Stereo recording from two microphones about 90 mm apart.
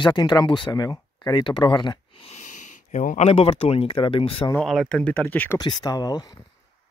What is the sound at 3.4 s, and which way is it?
Speech, 90° left.